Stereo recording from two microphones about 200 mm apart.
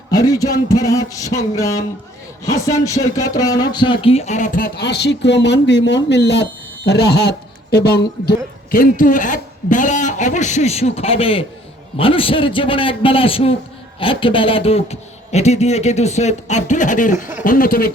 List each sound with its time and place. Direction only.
0.1 s speech: 20° left (ahead or behind); by 8.4 s 50° left (ahead or behind)
8.7 s a man's voice: 40° left (ahead or behind)